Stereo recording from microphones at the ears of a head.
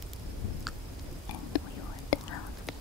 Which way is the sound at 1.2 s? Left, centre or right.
Left.